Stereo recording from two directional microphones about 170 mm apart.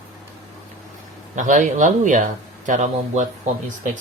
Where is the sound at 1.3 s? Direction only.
50° right (ahead or behind).